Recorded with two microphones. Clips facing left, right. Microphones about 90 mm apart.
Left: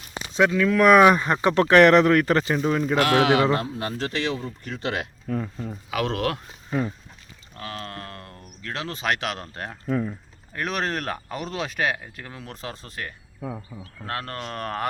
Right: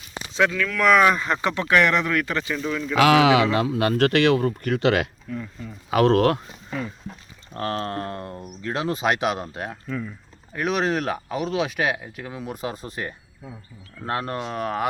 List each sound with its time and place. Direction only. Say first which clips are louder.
0.3 s speech: left 3 dB; 20° left (ahead or behind)
0.9 s speech: left 3 dB; 20° left (ahead or behind)
1.6 s speech: left 6 dB; 40° left (ahead or behind)
3.1 s speech: right 3 dB; 90° right
5.3 s speech: left 4 dB; 45° left (ahead or behind)
5.9 s speech: right 8 dB; 40° right (ahead or behind)
7.5 s speech: right 8 dB; 40° right (ahead or behind); by 9.7 s 10° right (ahead or behind)
9.8 s speech: left 5 dB; 35° left (ahead or behind)
10.5 s speech: right 4 dB; 5° right (ahead or behind)